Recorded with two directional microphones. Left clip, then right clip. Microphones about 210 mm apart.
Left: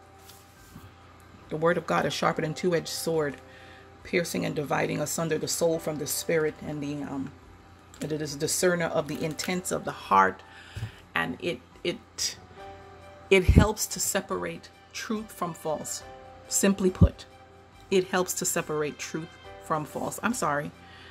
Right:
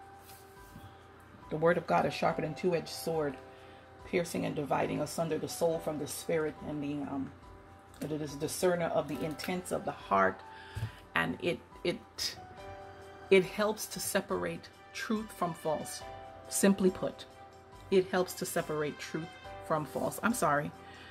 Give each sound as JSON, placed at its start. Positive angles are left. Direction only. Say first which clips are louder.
{"t": 1.5, "sound": "speech", "louder": "left 3 dB", "side_deg": 15}
{"t": 8.0, "sound": "speech", "louder": "left 6 dB", "side_deg": 35}
{"t": 11.1, "sound": "a woman's voice", "louder": "left 3 dB", "side_deg": 5}